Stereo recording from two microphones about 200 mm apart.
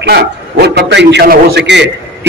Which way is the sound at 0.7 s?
55° right (ahead or behind).